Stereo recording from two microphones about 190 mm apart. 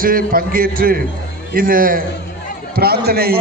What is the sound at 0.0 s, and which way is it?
A man's voice, 50° right (ahead or behind).